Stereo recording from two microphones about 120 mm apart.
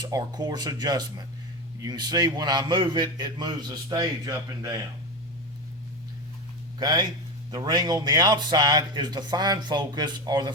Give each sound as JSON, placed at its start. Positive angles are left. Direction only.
{"t": 0.0, "sound": "a man's voice", "side_deg": -35}
{"t": 6.7, "sound": "a man's voice", "side_deg": -35}